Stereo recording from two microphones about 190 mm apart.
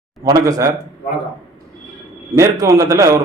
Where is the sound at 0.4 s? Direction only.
15° right (ahead or behind).